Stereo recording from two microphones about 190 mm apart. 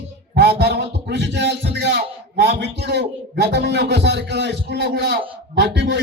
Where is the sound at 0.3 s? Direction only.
60° right (ahead or behind).